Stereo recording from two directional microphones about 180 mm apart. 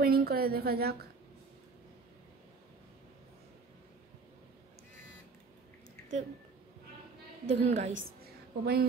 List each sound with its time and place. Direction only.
0.0 s a woman's voice: 60° right (ahead or behind)
7.4 s a woman's voice: 40° right (ahead or behind)
7.9 s a sound: 60° right (ahead or behind)